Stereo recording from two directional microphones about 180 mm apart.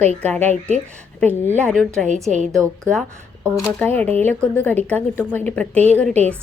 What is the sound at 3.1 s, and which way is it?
Shuffling cards, 15° right (ahead or behind).